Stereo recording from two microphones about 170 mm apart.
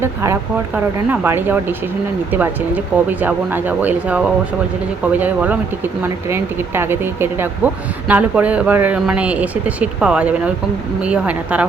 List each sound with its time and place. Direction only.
0.0 s speech: 15° right (ahead or behind)